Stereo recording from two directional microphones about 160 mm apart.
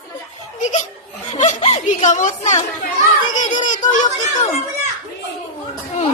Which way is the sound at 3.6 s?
50° left (ahead or behind).